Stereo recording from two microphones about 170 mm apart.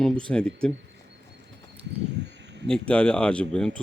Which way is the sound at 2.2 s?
90° right.